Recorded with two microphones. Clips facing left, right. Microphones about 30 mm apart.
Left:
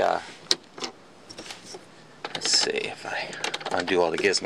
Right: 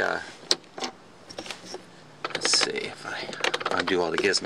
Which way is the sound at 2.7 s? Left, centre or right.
Centre.